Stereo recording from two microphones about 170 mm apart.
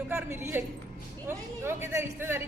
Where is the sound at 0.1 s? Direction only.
15° right (ahead or behind).